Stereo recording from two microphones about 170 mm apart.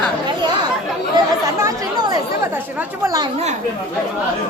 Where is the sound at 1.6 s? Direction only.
20° right (ahead or behind).